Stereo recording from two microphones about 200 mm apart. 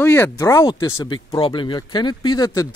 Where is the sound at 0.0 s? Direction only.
10° left (ahead or behind).